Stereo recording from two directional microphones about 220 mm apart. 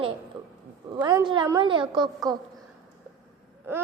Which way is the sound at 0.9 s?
15° right (ahead or behind).